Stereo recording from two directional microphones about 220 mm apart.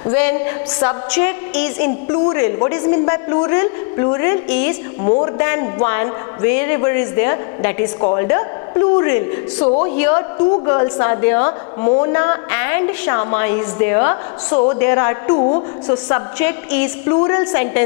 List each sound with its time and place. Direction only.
0.1 s a woman's voice: 15° left (ahead or behind)
5.0 s a man's voice: 30° left (ahead or behind)
5.4 s a woman's voice: 15° left (ahead or behind)
11.8 s a woman's voice: 25° left (ahead or behind)
14.5 s a woman's voice: 30° left (ahead or behind)
14.8 s a woman's voice: 15° left (ahead or behind)
15.3 s a man's voice: 30° left (ahead or behind)
16.3 s a woman's voice: 10° left (ahead or behind)